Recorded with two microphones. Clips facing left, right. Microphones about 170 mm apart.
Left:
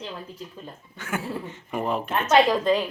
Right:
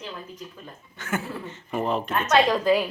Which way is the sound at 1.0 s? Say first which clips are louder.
Even; 10° left (ahead or behind).